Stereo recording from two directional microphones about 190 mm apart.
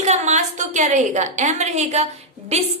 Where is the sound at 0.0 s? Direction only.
35° right (ahead or behind).